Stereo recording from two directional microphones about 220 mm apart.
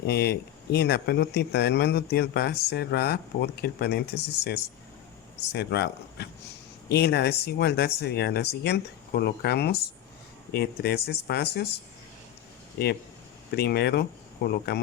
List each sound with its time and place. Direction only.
0.0 s speech: 45° left (ahead or behind)
13.6 s speech: 45° left (ahead or behind)